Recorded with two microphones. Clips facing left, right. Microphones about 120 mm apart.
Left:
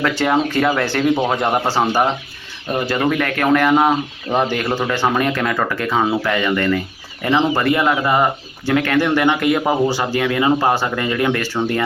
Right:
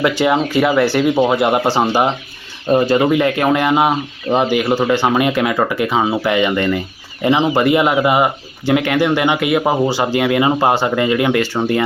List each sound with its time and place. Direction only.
0.0 s speech: 15° right (ahead or behind)